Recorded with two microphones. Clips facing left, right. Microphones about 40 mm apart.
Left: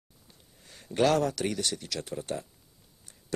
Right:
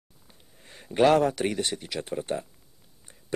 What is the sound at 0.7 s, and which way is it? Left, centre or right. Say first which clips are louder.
Speech: right 4 dB; right.